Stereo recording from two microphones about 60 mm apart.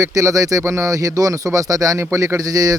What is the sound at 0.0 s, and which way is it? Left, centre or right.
Speech, right.